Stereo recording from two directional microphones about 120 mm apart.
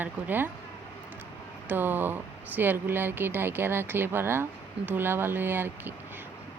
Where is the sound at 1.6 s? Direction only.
15° right (ahead or behind).